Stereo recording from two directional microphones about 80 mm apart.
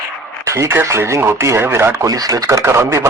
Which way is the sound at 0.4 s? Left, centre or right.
Right.